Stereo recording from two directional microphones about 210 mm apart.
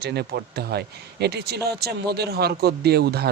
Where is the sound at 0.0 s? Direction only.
50° right (ahead or behind).